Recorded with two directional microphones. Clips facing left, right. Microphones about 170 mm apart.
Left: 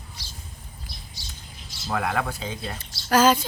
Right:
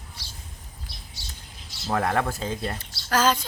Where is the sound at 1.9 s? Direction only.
40° right (ahead or behind).